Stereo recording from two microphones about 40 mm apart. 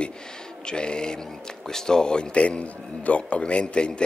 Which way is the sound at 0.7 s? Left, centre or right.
Left.